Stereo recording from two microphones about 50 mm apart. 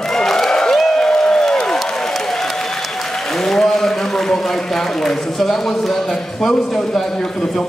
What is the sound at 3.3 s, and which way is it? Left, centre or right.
A man's voice, centre.